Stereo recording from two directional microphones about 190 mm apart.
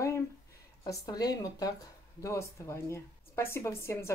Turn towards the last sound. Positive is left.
turn(degrees=15)  # may be behind; listen again after turning